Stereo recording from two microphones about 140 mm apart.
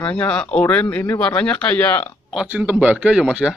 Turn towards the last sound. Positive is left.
turn(degrees=-5)  # may be behind; listen again after turning